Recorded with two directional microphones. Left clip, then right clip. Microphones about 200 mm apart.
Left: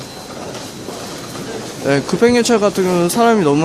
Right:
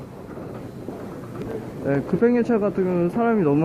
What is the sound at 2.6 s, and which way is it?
Speech, 40° left (ahead or behind).